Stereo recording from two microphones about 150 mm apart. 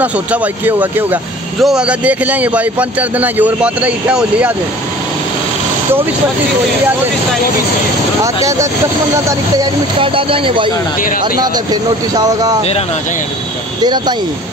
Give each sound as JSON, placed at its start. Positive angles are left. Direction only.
{"t": 0.0, "sound": "speech", "side_deg": -10}
{"t": 9.6, "sound": "speech", "side_deg": -35}